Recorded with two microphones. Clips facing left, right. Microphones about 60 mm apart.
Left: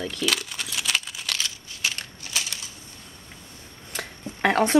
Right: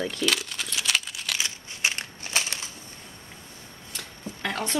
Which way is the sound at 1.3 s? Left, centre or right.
Right.